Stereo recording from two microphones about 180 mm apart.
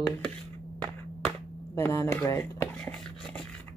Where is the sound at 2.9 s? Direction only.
Centre (ahead or behind).